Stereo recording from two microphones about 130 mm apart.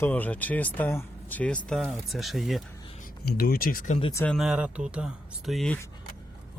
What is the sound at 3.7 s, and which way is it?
Speech, 80° left.